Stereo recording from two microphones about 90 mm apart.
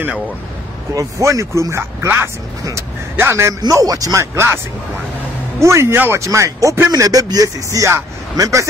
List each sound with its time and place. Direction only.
0.9 s speech: 35° right (ahead or behind)
3.6 s speech: 40° right (ahead or behind)
5.6 s speech: 30° right (ahead or behind)